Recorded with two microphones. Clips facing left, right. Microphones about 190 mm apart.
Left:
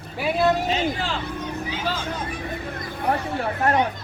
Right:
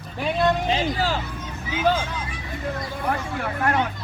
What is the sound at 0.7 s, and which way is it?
Speech, 40° right (ahead or behind).